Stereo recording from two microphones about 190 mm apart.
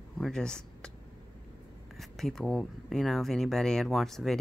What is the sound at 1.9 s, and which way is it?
Speech, centre (ahead or behind).